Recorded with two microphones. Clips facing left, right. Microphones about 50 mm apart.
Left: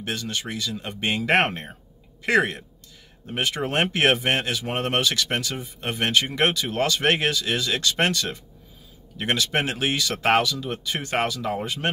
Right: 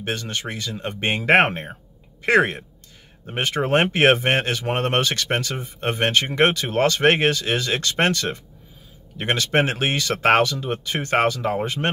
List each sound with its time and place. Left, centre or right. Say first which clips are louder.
0.0 s speech: right 2 dB; right